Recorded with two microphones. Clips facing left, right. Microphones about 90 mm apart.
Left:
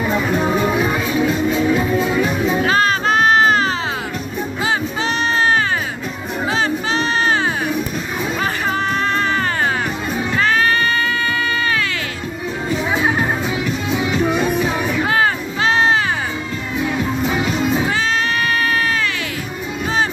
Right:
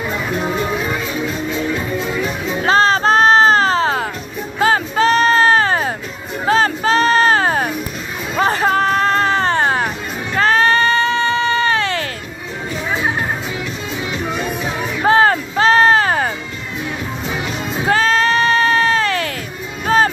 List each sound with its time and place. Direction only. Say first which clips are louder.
0.8 s music: left 4 dB; 10° left (ahead or behind)
2.6 s music: right 7 dB; 35° right (ahead or behind)
14.2 s music: left 4 dB; 10° left (ahead or behind)
15.0 s music: right 9 dB; 40° right (ahead or behind)
17.8 s music: right 4 dB; 40° right (ahead or behind)